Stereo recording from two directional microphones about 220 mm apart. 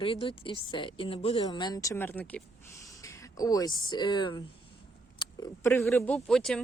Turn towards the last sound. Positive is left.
turn(degrees=5)  # may be behind; listen again after turning